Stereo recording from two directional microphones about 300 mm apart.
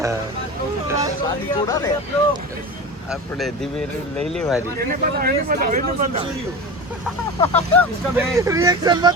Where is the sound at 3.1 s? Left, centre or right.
Centre.